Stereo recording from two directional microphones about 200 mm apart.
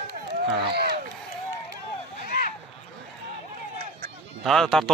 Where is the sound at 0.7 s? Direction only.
55° right (ahead or behind).